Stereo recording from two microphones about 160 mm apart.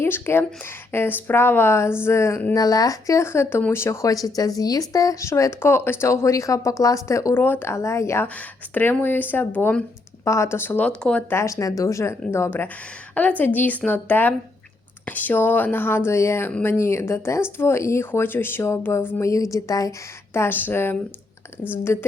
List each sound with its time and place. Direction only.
0.0 s speech: 15° left (ahead or behind)
11.3 s speech: 20° left (ahead or behind)